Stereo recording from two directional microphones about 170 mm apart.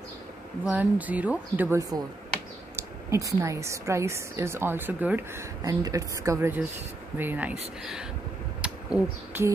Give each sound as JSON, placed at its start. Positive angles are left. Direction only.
{"t": 0.7, "sound": "a woman's voice", "side_deg": -10}
{"t": 3.1, "sound": "a woman's voice", "side_deg": -20}
{"t": 8.5, "sound": "a sound", "side_deg": -5}